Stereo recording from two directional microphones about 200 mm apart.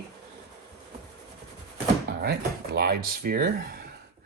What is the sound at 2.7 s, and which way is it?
Speech, 50° right (ahead or behind).